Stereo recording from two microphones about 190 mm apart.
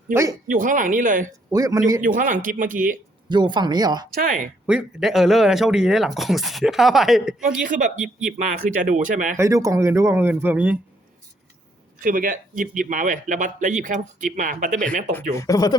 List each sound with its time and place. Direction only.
0.1 s speech: 15° right (ahead or behind)
0.4 s a man's voice: 45° right (ahead or behind)
1.5 s speech: 15° right (ahead or behind)
2.0 s a man's voice: 45° right (ahead or behind)
3.2 s speech: 25° right (ahead or behind)
4.1 s a man's voice: 45° right (ahead or behind)
4.6 s speech: 5° right (ahead or behind)
7.4 s a man's voice: 45° right (ahead or behind)
9.4 s speech: 15° right (ahead or behind)
11.9 s a man's voice: 45° right (ahead or behind)
15.1 s speech: 15° left (ahead or behind)